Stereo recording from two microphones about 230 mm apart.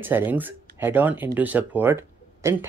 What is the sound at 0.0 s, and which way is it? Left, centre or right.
Speech, centre.